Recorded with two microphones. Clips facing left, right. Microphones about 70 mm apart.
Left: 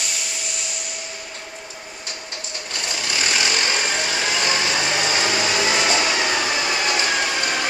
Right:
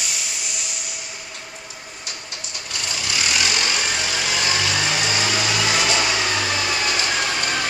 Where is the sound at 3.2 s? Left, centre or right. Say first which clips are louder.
Left 1 dB; left; by 7.2 s centre.